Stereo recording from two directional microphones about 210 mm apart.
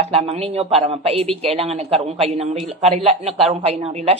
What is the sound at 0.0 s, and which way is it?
Speech, 30° right (ahead or behind).